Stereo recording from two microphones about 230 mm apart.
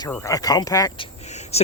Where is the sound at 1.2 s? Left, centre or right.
Left.